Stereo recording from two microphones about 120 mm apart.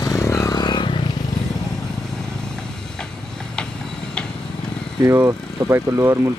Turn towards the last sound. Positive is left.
turn(degrees=-25)  # may be behind; listen again after turning